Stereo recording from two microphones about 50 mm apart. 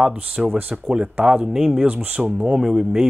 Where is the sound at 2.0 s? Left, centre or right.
Right.